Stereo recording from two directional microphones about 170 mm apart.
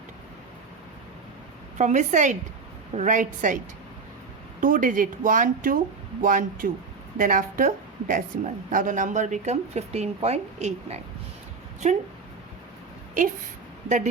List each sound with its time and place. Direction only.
1.8 s a woman's voice: 45° right (ahead or behind)
4.6 s a woman's voice: 50° right (ahead or behind)
13.8 s a woman's voice: 45° right (ahead or behind)